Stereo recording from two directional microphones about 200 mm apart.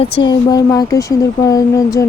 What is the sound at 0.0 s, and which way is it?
Speech, 20° left (ahead or behind).